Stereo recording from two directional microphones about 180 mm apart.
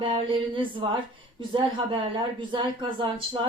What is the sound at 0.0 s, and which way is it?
A woman's voice, 30° right (ahead or behind).